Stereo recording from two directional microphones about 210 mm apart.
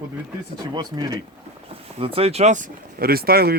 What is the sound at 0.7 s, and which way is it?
Speech, 20° right (ahead or behind).